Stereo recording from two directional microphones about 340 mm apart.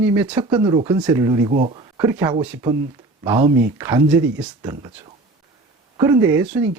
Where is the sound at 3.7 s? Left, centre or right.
Centre.